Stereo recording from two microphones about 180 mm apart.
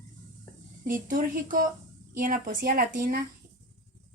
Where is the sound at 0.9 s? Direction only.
50° right (ahead or behind).